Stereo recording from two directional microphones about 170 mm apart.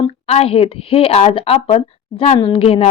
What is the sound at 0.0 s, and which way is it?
A woman's voice, 35° left (ahead or behind).